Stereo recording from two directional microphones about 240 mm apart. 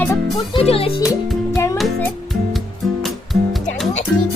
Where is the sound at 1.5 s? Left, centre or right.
Centre.